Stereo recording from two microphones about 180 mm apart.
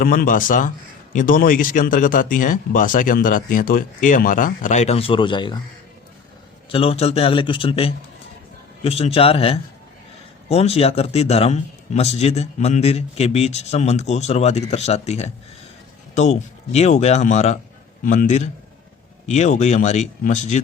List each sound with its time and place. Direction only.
0.0 s speech: 50° left (ahead or behind); by 5.5 s 25° left (ahead or behind)
6.7 s a man's voice: 30° left (ahead or behind)